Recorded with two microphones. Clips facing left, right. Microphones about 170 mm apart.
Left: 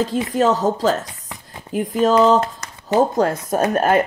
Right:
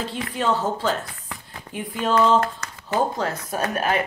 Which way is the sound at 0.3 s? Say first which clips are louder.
Left 4 dB; 40° left (ahead or behind).